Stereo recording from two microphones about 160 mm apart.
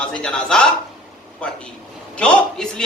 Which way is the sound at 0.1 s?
5° left (ahead or behind).